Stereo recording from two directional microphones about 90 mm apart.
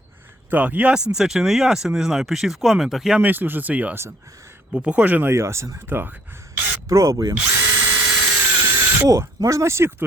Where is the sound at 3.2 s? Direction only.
20° right (ahead or behind).